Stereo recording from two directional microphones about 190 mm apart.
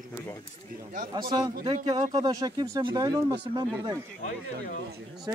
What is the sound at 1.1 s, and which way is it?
Speech, 20° right (ahead or behind).